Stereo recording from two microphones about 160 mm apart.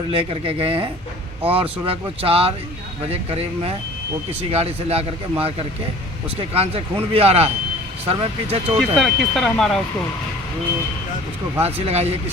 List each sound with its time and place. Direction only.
0.1 s a man's voice: 35° right (ahead or behind)
9.0 s speech: centre (ahead or behind)
11.6 s a man's voice: 40° right (ahead or behind)